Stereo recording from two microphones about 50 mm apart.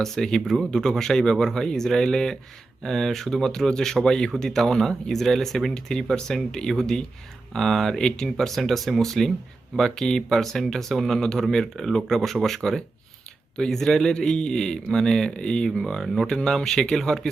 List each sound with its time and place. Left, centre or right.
0.0 s speech: centre